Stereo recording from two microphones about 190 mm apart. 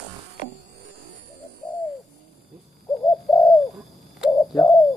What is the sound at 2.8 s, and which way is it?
Bird, 15° left (ahead or behind).